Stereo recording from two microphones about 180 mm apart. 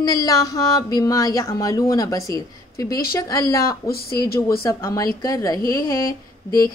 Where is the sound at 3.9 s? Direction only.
60° left (ahead or behind).